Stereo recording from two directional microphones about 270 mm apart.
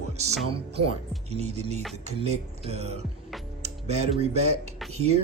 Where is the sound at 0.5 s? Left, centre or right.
Right.